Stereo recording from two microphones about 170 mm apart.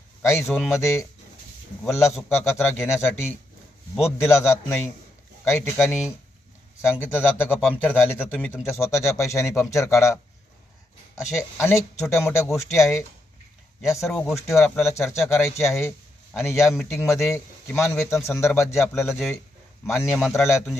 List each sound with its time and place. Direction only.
0.2 s a sound: 15° left (ahead or behind)
0.4 s speech: centre (ahead or behind)
0.7 s speech: 15° left (ahead or behind)
14.0 s speech: 5° left (ahead or behind)
14.3 s speech: 15° left (ahead or behind)
19.1 s speech: centre (ahead or behind)
19.9 s speech: 15° left (ahead or behind)